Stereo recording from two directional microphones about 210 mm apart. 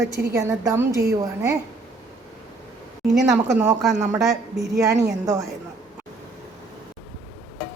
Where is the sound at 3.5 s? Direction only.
10° right (ahead or behind).